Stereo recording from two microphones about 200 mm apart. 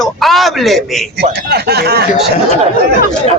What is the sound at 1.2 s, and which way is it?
Speech, 55° right (ahead or behind).